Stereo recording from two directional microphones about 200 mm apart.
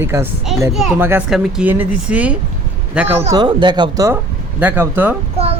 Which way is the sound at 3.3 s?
20° right (ahead or behind).